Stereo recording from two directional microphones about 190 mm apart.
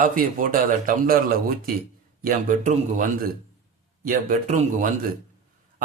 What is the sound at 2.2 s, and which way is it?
A man's voice, 45° right (ahead or behind).